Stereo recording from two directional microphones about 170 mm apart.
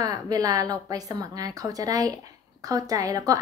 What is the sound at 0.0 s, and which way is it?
A woman's voice, 20° right (ahead or behind).